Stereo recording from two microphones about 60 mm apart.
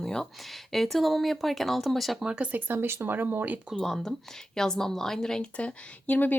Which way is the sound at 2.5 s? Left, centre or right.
Right.